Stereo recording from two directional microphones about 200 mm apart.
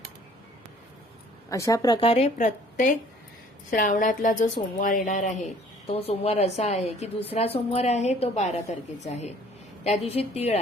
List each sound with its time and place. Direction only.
1.5 s a woman's voice: 15° left (ahead or behind); by 10.6 s 30° left (ahead or behind)